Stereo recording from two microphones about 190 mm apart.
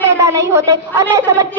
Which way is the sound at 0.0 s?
15° right (ahead or behind).